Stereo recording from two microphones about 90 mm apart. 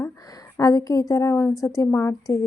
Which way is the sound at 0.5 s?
35° left (ahead or behind).